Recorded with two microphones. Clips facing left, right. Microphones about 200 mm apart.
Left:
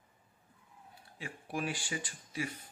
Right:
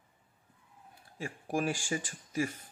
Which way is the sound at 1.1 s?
45° right (ahead or behind).